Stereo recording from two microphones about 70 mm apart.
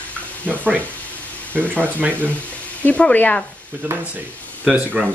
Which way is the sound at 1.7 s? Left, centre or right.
Right.